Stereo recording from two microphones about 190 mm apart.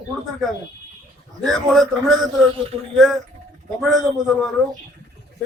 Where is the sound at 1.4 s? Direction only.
Centre (ahead or behind).